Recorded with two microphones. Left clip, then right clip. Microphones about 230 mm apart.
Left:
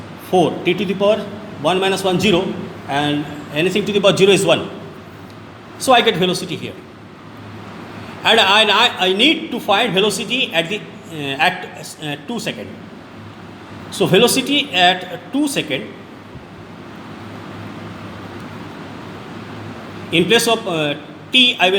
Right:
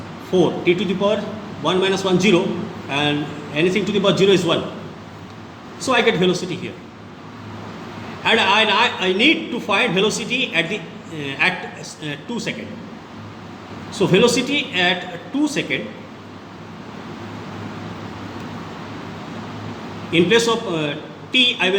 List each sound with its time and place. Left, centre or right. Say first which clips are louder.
0.3 s a man's voice: left 2 dB; left
5.8 s a man's voice: left 4 dB; left
8.2 s a man's voice: left 3 dB; left
10.2 s a man's voice: left 2 dB; centre
11.2 s a man's voice: left 3 dB; left
13.9 s a man's voice: left 2 dB; left
20.1 s a man's voice: left 2 dB; left